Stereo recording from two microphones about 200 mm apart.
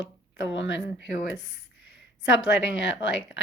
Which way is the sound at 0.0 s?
65° left (ahead or behind).